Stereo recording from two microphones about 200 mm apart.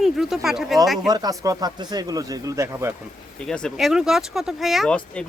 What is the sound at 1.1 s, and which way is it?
Speech, 20° right (ahead or behind).